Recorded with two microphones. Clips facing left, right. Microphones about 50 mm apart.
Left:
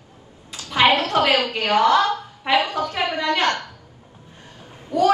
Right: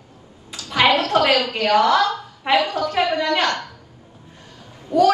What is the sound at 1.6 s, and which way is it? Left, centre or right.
A woman's voice, left.